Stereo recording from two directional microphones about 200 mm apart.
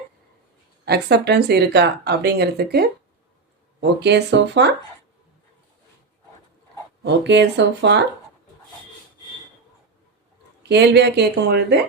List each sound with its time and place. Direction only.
0.9 s speech: 55° right (ahead or behind)
7.0 s speech: 60° right (ahead or behind)
10.6 s speech: 55° right (ahead or behind)